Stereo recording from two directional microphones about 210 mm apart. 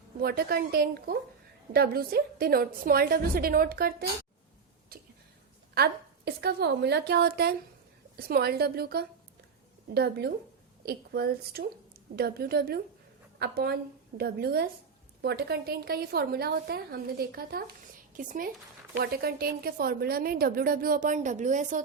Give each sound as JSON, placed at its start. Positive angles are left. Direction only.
{"t": 0.2, "sound": "a woman's voice", "side_deg": -50}
{"t": 5.7, "sound": "a woman's voice", "side_deg": -50}